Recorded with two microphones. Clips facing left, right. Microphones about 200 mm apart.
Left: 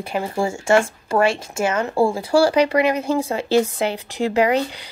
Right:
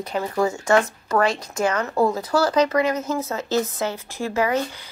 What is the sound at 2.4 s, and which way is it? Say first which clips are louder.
A woman's voice: left 3 dB; 10° left (ahead or behind).